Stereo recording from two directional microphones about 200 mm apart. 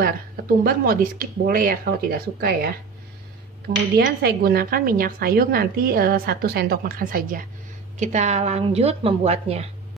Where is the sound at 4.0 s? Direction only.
50° right (ahead or behind); by 9.6 s 30° right (ahead or behind).